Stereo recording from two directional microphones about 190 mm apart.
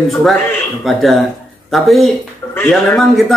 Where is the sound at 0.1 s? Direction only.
Centre (ahead or behind).